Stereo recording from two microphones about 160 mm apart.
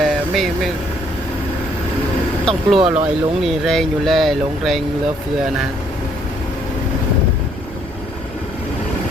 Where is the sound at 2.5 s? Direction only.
35° right (ahead or behind).